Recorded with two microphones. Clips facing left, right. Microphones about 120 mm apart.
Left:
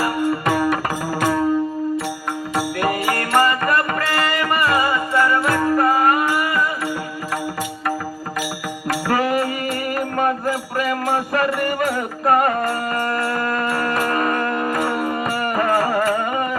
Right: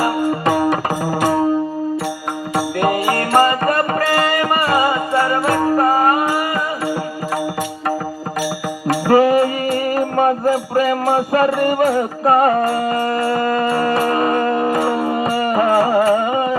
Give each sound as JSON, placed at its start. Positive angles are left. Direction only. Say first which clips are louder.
{"t": 0.0, "sound": "music", "louder": "right 3 dB", "side_deg": -30}
{"t": 2.6, "sound": "music", "louder": "right 4 dB", "side_deg": -25}
{"t": 8.9, "sound": "music", "louder": "right 7 dB", "side_deg": -30}